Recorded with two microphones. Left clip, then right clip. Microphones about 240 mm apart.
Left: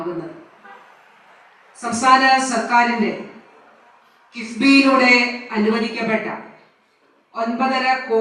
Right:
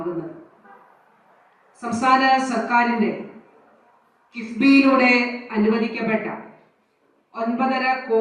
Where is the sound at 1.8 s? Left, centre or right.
Centre.